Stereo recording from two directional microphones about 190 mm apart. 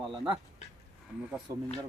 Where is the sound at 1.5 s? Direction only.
15° right (ahead or behind).